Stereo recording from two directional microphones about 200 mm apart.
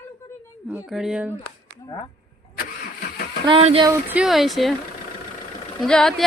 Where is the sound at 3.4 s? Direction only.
25° right (ahead or behind).